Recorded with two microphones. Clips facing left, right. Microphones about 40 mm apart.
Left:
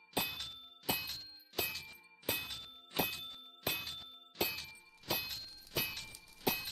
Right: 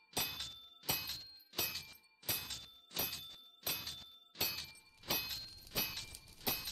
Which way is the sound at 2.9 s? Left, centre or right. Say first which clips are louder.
Left 7 dB; left.